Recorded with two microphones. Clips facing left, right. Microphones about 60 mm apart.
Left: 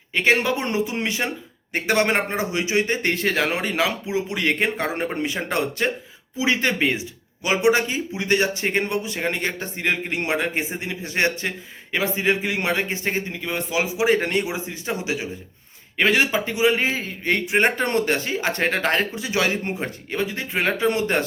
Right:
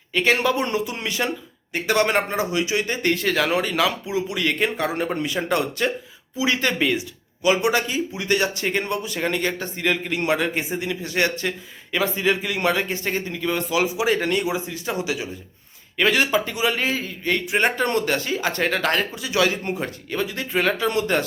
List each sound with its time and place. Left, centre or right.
0.1 s speech: left